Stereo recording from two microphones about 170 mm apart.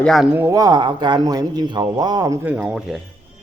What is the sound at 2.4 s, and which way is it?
Speech, 10° right (ahead or behind).